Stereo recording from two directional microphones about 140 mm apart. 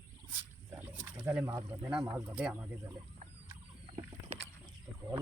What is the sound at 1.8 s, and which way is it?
Speech, 10° right (ahead or behind).